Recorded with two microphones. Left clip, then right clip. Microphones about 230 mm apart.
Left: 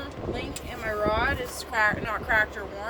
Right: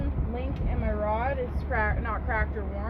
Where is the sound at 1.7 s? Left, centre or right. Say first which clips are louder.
Left 5 dB; centre.